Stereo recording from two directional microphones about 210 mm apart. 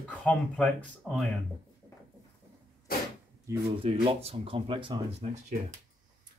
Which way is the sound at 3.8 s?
25° right (ahead or behind).